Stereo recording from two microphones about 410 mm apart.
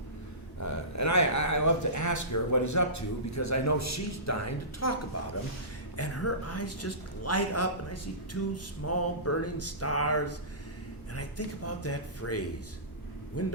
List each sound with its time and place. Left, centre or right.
0.6 s a man's voice: left
6.0 s a man's voice: left